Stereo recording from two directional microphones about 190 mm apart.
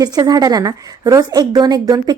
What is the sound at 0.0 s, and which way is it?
A woman's voice, 20° right (ahead or behind).